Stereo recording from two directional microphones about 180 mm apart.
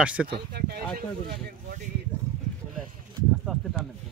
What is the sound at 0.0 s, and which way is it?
Speech, 5° right (ahead or behind).